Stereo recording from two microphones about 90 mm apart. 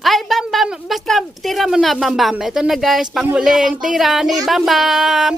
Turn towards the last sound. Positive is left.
turn(degrees=-5)  # may be behind; listen again after turning